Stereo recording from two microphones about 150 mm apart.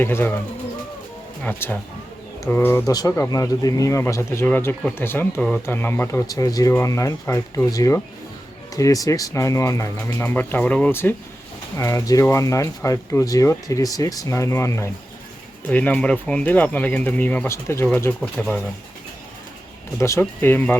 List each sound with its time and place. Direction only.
0.0 s speech: 15° left (ahead or behind)
1.5 s speech: 15° left (ahead or behind)
20.0 s speech: 15° left (ahead or behind)